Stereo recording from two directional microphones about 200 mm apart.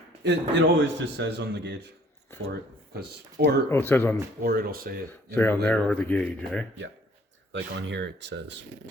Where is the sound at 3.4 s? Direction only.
50° right (ahead or behind).